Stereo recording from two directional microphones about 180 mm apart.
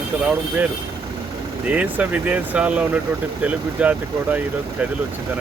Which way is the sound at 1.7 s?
10° right (ahead or behind).